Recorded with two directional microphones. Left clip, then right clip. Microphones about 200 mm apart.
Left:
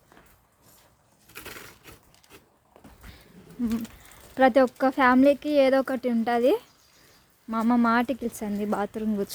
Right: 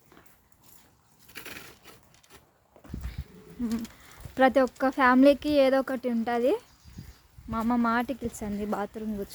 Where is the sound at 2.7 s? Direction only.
50° left (ahead or behind).